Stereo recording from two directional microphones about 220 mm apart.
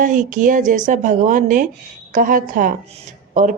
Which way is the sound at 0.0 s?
35° right (ahead or behind).